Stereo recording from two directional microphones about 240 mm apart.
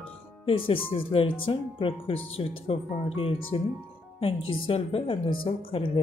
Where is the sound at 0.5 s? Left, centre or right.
Left.